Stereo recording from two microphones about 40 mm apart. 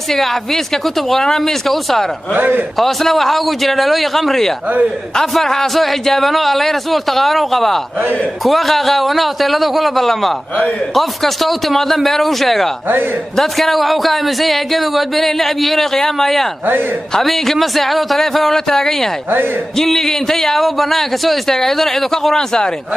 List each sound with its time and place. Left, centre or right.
0.1 s speech: centre
2.3 s a man's voice: right
2.8 s speech: centre